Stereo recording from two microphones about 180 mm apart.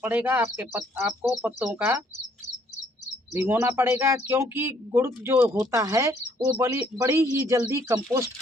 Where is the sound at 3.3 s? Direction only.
15° right (ahead or behind).